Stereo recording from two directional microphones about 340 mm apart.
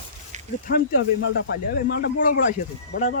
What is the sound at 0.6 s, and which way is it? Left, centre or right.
Speech, left.